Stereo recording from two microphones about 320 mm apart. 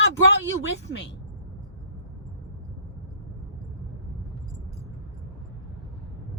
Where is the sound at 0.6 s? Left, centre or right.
Left.